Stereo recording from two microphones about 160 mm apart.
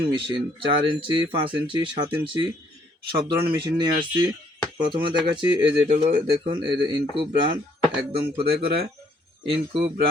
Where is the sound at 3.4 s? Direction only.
30° right (ahead or behind).